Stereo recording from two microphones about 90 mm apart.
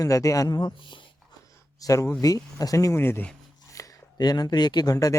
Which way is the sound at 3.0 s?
25° left (ahead or behind).